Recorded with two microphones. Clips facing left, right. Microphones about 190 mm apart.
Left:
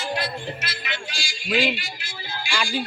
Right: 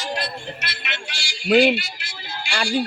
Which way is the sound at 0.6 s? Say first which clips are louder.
Even; 65° right (ahead or behind).